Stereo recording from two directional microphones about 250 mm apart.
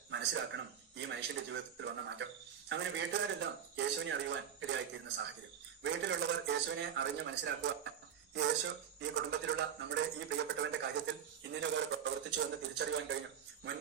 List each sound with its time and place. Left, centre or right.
0.1 s a man's voice: right
9.0 s a man's voice: right